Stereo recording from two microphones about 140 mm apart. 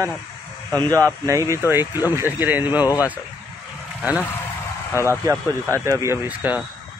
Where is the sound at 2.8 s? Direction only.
25° left (ahead or behind).